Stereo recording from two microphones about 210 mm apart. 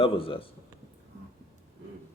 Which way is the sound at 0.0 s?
25° left (ahead or behind).